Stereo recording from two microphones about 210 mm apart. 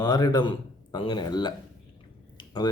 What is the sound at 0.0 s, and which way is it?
Speech, 20° left (ahead or behind).